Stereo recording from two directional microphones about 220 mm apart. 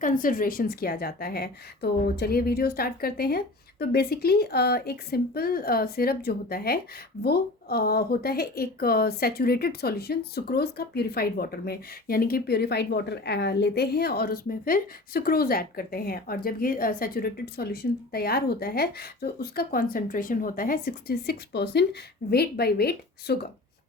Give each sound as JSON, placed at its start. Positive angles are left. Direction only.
{"t": 0.0, "sound": "a woman's voice", "side_deg": 40}